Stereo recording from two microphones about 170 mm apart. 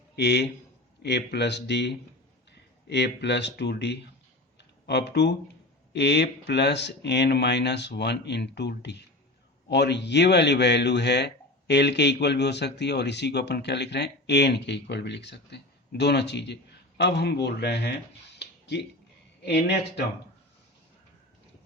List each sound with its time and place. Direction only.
0.2 s a man's voice: 85° left
18.3 s a sound: 80° left
19.4 s a man's voice: 75° left (ahead or behind)